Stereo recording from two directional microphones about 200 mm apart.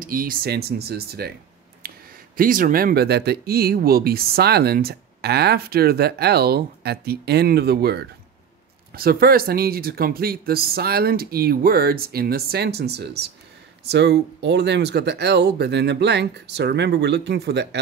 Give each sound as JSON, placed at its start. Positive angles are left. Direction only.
{"t": 0.0, "sound": "speech", "side_deg": -45}
{"t": 1.8, "sound": "a sound", "side_deg": -50}
{"t": 2.3, "sound": "speech", "side_deg": -45}